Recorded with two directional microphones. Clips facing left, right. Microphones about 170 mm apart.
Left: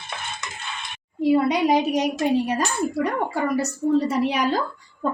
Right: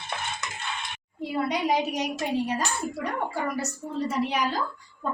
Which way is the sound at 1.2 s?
75° left (ahead or behind).